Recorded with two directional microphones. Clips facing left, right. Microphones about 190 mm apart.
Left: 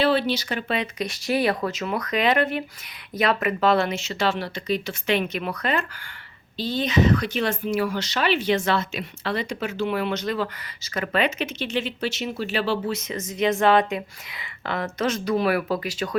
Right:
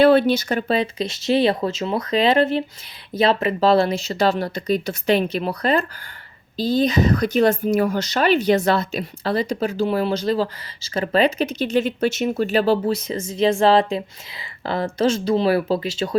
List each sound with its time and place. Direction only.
0.0 s speech: 50° right (ahead or behind); by 16.1 s 25° right (ahead or behind)